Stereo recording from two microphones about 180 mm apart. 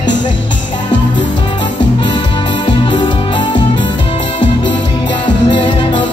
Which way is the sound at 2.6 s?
25° left (ahead or behind).